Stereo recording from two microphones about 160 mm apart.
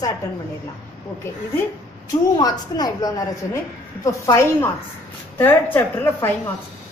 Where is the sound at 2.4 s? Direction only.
25° left (ahead or behind).